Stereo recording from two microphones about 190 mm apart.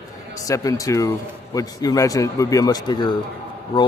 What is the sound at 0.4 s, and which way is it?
A man's voice, 20° left (ahead or behind).